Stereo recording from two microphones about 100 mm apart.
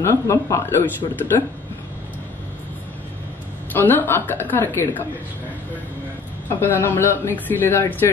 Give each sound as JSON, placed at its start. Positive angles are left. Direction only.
{"t": 0.0, "sound": "speech", "side_deg": 25}
{"t": 3.7, "sound": "speech", "side_deg": 20}
{"t": 6.6, "sound": "speech", "side_deg": 20}